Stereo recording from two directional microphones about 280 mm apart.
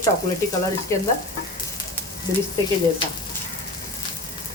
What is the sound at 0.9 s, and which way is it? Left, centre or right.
Frying, centre.